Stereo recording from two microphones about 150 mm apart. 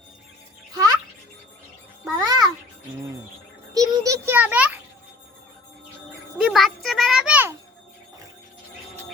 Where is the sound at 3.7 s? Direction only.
20° right (ahead or behind).